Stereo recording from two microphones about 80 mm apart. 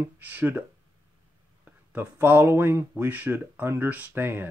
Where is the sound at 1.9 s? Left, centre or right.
Right.